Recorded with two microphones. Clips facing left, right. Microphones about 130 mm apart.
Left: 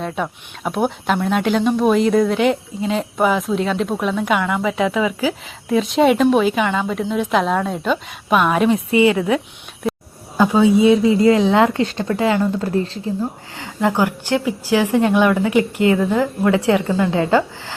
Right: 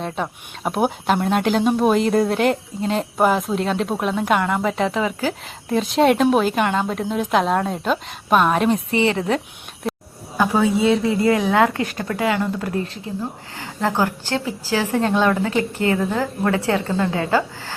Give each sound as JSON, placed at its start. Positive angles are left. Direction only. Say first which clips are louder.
{"t": 0.0, "sound": "a woman's voice", "louder": "left 2 dB", "side_deg": 0}
{"t": 10.3, "sound": "speech", "louder": "left 4 dB", "side_deg": 20}
{"t": 14.0, "sound": "a woman's voice", "louder": "left 3 dB", "side_deg": 15}